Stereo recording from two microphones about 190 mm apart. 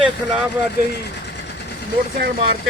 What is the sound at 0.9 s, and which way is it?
Sewing machine, 60° left (ahead or behind).